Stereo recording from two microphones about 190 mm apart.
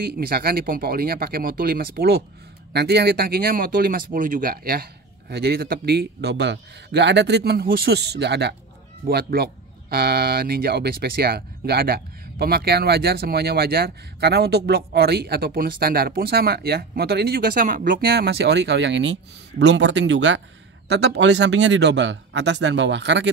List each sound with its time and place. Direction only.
0.0 s speech: 55° right (ahead or behind); by 20.4 s 70° right (ahead or behind)
20.9 s speech: 60° right (ahead or behind)